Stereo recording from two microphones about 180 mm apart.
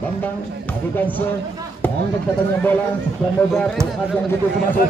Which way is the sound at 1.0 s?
10° left (ahead or behind).